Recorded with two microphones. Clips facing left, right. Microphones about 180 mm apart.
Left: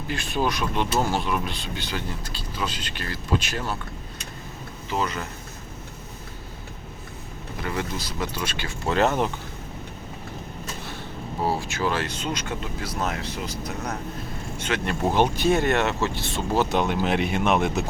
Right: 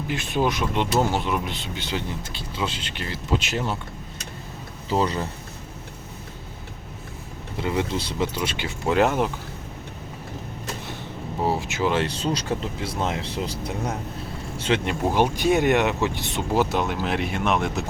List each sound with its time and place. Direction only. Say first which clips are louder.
0.1 s speech: right 2 dB; 20° right (ahead or behind)
4.9 s speech: right 4 dB; 30° right (ahead or behind)
7.6 s speech: right 5 dB; 20° right (ahead or behind)
11.4 s speech: right 2 dB; 20° right (ahead or behind)
12.0 s speech: right 4 dB; 35° right (ahead or behind)
14.8 s speech: left 3 dB; 10° right (ahead or behind)